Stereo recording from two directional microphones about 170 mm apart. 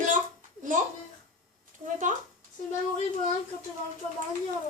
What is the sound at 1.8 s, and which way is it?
Speech, 50° right (ahead or behind).